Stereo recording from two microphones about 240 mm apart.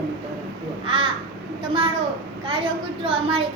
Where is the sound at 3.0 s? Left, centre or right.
Right.